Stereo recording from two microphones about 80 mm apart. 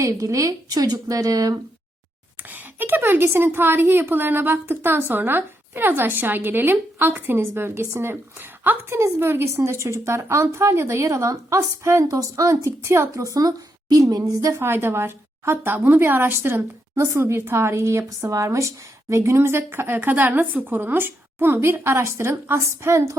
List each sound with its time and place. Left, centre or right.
0.0 s a woman's voice: right
2.5 s a sound: right
3.2 s a woman's voice: right
14.5 s speech: right